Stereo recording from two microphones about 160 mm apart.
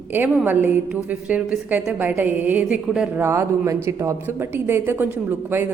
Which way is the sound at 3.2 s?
15° right (ahead or behind).